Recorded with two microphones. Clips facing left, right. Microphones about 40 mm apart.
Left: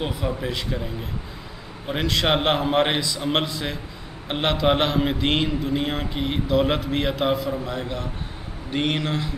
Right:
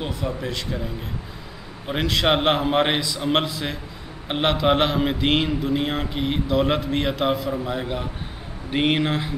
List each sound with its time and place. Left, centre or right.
0.0 s speech: centre
1.9 s a man's voice: centre